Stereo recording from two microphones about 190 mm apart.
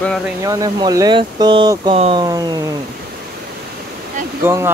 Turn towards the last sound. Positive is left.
turn(degrees=-10)  # may be behind; listen again after turning